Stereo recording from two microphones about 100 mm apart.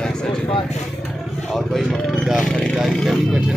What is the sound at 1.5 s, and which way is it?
Speech, centre (ahead or behind).